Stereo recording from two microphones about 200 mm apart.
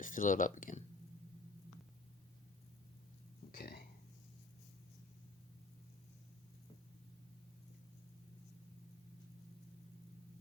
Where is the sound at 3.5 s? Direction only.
50° left (ahead or behind).